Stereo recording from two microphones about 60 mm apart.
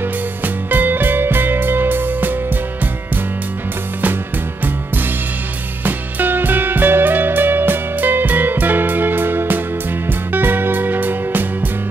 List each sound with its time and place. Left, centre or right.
0.4 s music: right
5.9 s music: right